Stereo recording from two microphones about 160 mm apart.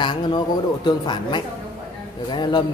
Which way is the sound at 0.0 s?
30° left (ahead or behind).